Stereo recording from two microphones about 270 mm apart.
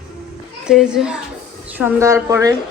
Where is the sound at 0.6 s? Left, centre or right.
Centre.